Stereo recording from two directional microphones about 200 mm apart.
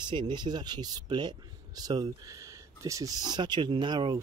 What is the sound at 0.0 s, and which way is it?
Speech, 25° right (ahead or behind).